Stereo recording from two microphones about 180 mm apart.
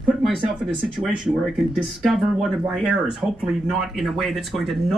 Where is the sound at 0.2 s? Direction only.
Centre (ahead or behind).